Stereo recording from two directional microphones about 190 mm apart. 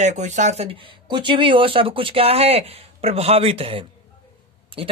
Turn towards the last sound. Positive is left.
turn(degrees=-30)  # may be behind; listen again after turning